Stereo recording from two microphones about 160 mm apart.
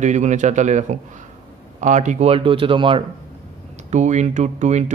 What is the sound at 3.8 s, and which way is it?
A man's voice, 45° right (ahead or behind).